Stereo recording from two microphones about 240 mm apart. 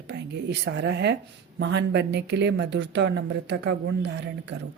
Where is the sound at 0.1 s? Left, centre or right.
Right.